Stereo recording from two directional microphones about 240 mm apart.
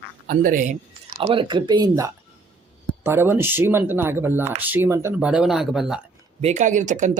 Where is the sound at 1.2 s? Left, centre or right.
Right; by 6.0 s centre.